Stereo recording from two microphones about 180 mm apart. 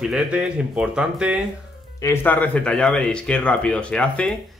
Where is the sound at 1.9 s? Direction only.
15° left (ahead or behind).